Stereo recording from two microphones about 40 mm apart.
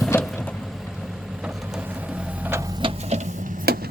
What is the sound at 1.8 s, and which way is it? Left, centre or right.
Music, right.